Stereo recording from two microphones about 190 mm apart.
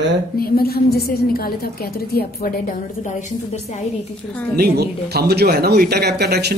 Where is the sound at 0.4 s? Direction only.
55° left (ahead or behind).